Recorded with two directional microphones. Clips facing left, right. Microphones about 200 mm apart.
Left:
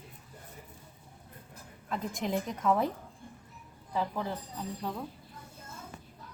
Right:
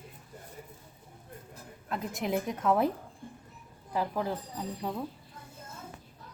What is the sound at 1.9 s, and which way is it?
A woman's voice, 5° right (ahead or behind).